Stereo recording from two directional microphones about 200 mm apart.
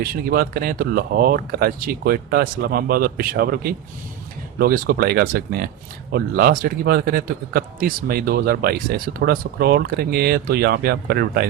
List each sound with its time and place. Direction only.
0.0 s speech: 50° right (ahead or behind)